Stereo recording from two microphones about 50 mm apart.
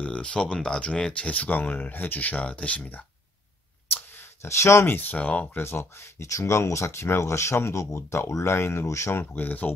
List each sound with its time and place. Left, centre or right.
0.0 s speech: left
2.8 s speech: left
3.9 s a sound: left
4.8 s speech: left
5.1 s speech: left
5.6 s speech: left
9.1 s speech: left